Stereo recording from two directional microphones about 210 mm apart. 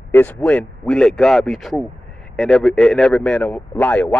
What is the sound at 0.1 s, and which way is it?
A man's voice, 10° left (ahead or behind).